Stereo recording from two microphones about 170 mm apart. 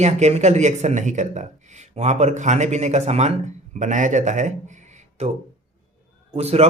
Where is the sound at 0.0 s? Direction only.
40° right (ahead or behind).